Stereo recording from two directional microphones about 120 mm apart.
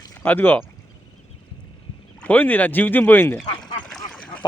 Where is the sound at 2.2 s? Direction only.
15° left (ahead or behind).